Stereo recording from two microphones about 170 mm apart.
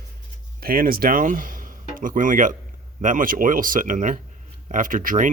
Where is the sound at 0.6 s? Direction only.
60° right (ahead or behind).